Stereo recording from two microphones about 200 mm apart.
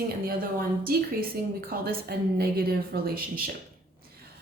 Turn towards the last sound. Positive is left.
turn(degrees=-45)  # may be behind; listen again after turning